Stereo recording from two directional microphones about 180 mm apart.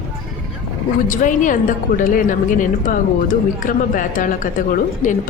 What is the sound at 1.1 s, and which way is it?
A woman's voice, 45° left (ahead or behind).